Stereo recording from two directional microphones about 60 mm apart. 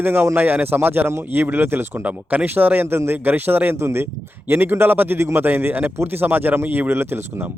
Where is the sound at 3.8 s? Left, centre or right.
Right.